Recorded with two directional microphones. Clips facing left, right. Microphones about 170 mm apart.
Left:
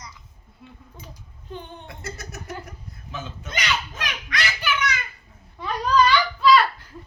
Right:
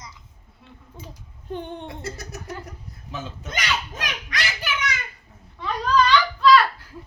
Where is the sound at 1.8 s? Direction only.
35° right (ahead or behind).